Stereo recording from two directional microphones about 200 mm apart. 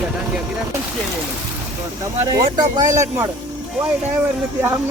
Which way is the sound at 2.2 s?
20° right (ahead or behind).